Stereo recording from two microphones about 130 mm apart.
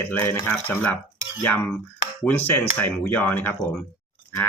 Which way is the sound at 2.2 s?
15° left (ahead or behind).